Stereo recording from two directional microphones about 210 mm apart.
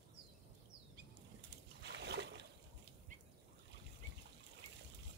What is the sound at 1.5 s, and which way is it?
Boat, 55° right (ahead or behind).